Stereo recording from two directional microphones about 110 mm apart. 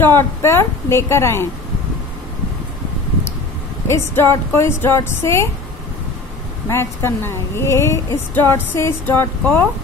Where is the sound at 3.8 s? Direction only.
25° left (ahead or behind).